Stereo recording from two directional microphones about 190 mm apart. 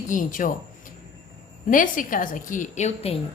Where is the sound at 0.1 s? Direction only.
45° left (ahead or behind).